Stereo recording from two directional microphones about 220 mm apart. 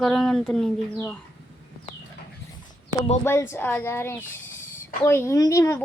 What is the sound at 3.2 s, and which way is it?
Speech, 10° left (ahead or behind).